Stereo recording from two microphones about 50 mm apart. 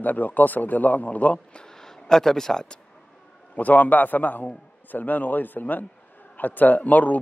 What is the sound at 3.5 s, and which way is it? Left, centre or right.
A man's voice, left.